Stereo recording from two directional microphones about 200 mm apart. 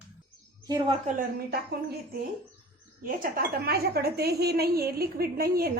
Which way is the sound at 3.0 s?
45° right (ahead or behind).